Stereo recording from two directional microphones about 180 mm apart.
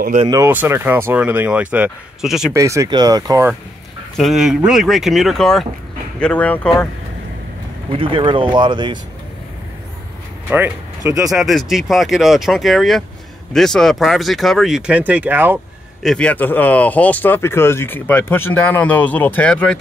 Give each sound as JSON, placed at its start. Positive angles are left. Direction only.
{"t": 0.3, "sound": "speech", "side_deg": -15}
{"t": 2.5, "sound": "speech", "side_deg": -15}
{"t": 4.2, "sound": "speech", "side_deg": 0}
{"t": 8.0, "sound": "speech", "side_deg": -30}
{"t": 11.1, "sound": "speech", "side_deg": -15}
{"t": 11.3, "sound": "speech", "side_deg": 0}
{"t": 16.0, "sound": "speech", "side_deg": 5}